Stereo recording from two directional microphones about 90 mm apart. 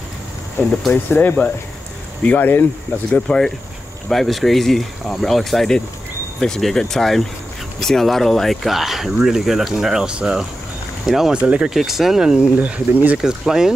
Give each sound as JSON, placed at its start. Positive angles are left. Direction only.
{"t": 1.1, "sound": "speech", "side_deg": 20}
{"t": 3.1, "sound": "speech", "side_deg": 10}
{"t": 11.7, "sound": "speech", "side_deg": 0}